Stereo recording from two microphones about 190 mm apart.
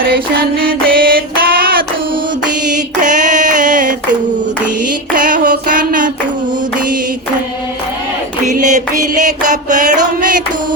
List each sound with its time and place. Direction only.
0.6 s a sound: 50° right (ahead or behind)
2.6 s female singing: 40° right (ahead or behind)
5.1 s child singing: 45° right (ahead or behind)
8.4 s music: 40° right (ahead or behind)